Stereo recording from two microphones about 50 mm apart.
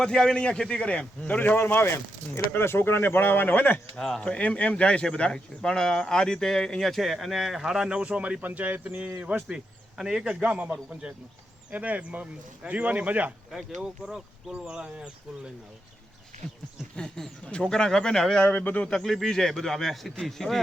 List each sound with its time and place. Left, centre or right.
0.0 s a man's voice: centre
1.4 s speech: left
3.9 s speech: centre
4.2 s a man's voice: left; by 9.4 s right
10.0 s speech: centre
10.2 s a man's voice: right
13.6 s speech: centre
14.8 s a man's voice: right
17.4 s speech: centre
18.4 s a man's voice: left
18.9 s a man's voice: centre